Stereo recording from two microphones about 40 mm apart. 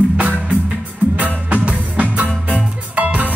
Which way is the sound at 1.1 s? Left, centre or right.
Right.